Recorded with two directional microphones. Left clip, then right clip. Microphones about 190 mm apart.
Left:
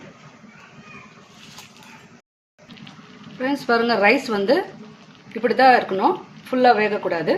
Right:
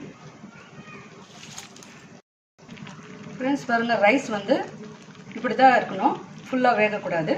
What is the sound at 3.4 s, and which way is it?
A woman's voice, 45° left (ahead or behind).